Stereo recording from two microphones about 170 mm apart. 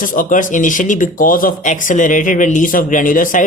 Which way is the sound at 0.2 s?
50° left (ahead or behind).